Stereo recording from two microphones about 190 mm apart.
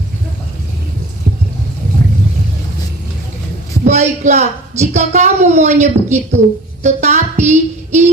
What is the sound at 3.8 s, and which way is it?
A woman's voice, 35° right (ahead or behind).